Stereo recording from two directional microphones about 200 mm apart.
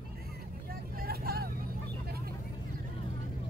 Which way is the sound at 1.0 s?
50° right (ahead or behind).